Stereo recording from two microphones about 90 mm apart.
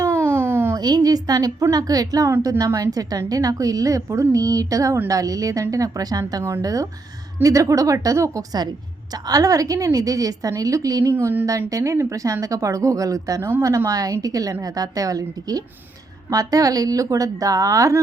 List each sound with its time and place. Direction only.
0.0 s a sound: 30° right (ahead or behind)
0.8 s a woman's voice: 45° right (ahead or behind)
11.1 s a woman's voice: 25° right (ahead or behind)